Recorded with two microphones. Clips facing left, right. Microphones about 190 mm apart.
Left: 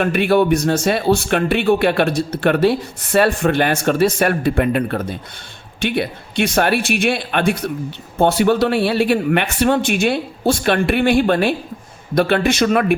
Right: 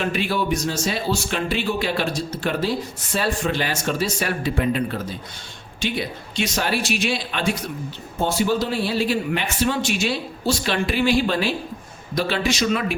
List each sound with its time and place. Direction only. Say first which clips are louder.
0.0 s speech: left 8 dB; 60° left (ahead or behind)